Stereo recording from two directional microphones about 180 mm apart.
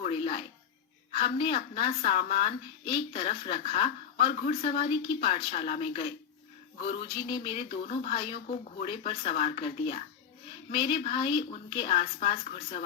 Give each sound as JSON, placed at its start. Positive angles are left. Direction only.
{"t": 0.0, "sound": "music", "side_deg": 30}
{"t": 1.1, "sound": "a woman's voice", "side_deg": 30}